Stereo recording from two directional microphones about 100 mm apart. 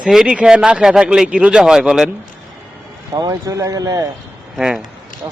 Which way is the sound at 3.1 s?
40° right (ahead or behind).